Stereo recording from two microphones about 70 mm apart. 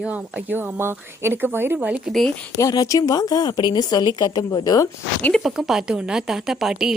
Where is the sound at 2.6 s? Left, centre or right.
Left.